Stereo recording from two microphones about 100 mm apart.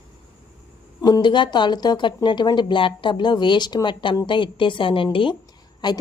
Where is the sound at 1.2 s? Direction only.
50° left (ahead or behind).